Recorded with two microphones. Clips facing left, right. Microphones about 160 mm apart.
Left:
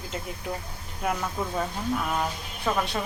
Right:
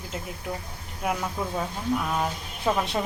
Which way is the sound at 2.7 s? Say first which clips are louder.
Right 2 dB; 20° right (ahead or behind).